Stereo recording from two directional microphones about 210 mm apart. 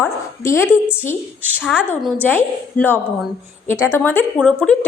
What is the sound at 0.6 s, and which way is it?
Speech, 5° right (ahead or behind).